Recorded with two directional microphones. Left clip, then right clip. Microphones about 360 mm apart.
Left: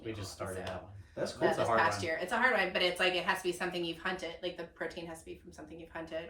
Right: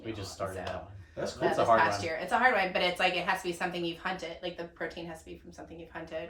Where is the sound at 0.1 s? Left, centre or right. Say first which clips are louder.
Right 4 dB; centre.